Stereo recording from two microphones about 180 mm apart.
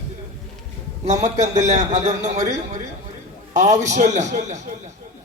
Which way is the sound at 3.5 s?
40° right (ahead or behind).